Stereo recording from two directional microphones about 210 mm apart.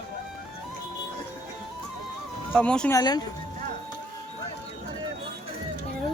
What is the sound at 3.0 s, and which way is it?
Speech, 20° left (ahead or behind).